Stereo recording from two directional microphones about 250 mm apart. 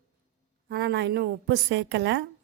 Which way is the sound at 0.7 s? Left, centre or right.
Right.